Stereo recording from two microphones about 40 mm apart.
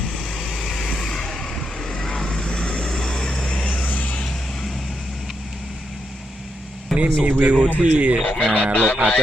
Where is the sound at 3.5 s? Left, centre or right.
Left.